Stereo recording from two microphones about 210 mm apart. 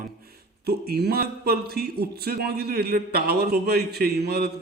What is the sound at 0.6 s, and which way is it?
A man's voice, 50° right (ahead or behind).